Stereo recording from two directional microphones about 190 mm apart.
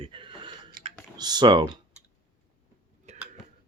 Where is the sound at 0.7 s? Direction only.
45° right (ahead or behind).